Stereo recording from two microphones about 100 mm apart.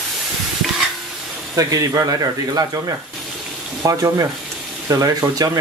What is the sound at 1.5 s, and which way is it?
Speech, 35° right (ahead or behind).